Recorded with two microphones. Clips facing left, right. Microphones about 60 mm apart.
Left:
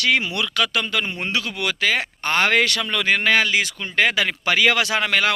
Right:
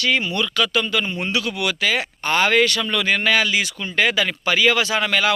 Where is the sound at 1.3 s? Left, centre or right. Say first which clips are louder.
Right 1 dB; left.